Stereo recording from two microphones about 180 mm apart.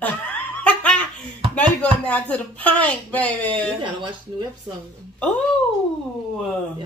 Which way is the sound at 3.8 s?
25° right (ahead or behind).